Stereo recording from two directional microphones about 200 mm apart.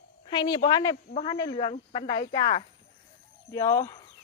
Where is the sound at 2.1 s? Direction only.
35° left (ahead or behind).